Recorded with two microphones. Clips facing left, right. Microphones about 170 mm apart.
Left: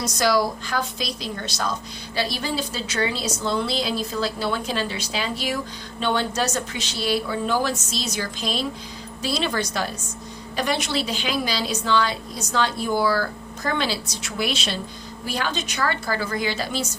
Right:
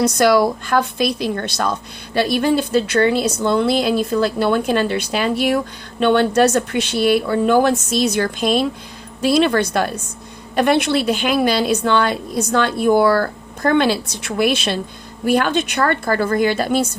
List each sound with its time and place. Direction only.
0.0 s a woman's voice: 60° right (ahead or behind)